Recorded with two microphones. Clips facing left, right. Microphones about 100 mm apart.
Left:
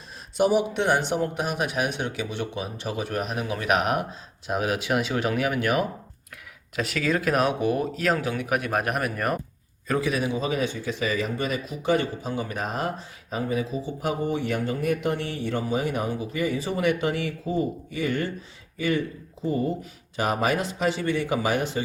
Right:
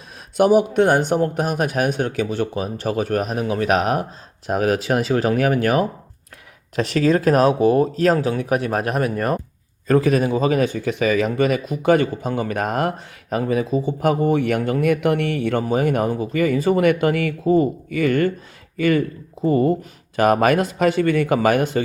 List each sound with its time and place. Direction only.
0.3 s speech: 55° right (ahead or behind)
11.0 s speech: 65° right (ahead or behind)